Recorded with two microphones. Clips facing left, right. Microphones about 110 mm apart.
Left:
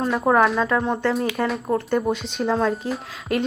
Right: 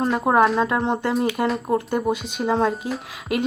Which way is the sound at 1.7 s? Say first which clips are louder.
Even; 10° right (ahead or behind).